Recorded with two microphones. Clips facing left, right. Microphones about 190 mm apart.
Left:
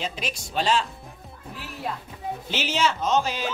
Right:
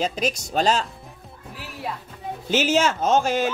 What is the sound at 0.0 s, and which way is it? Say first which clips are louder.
Speech: right 7 dB; 40° right (ahead or behind).